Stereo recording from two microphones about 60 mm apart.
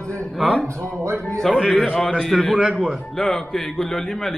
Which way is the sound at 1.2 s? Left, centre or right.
Centre.